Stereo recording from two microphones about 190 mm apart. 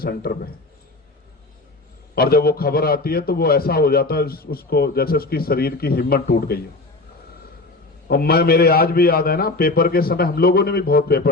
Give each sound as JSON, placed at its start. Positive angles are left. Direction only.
{"t": 0.0, "sound": "a man's voice", "side_deg": 50}
{"t": 2.1, "sound": "a man's voice", "side_deg": 55}
{"t": 8.0, "sound": "a man's voice", "side_deg": 55}